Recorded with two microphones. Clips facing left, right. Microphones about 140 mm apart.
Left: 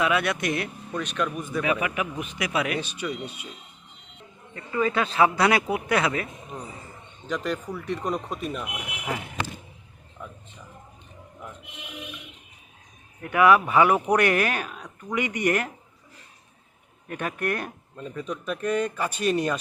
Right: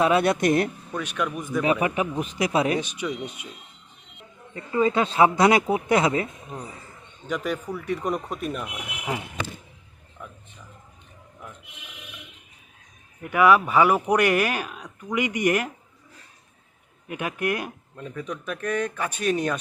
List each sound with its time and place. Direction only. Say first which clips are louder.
0.0 s a man's voice: right 5 dB; 35° right (ahead or behind)
0.9 s speech: even; 10° right (ahead or behind)
1.6 s a man's voice: right 4 dB; 35° right (ahead or behind)
2.7 s speech: right 2 dB; 15° right (ahead or behind)
4.5 s speech: right 3 dB; 25° right (ahead or behind)
7.3 s speech: right 1 dB; 5° right (ahead or behind)
13.2 s speech: even; 5° right (ahead or behind)
17.1 s speech: right 1 dB; 10° right (ahead or behind)
18.0 s speech: left 1 dB; centre (ahead or behind)